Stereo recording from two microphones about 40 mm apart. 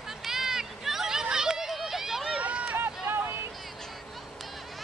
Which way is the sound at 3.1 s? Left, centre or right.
Right.